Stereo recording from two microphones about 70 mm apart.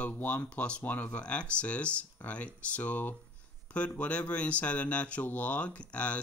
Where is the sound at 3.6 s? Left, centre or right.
Centre.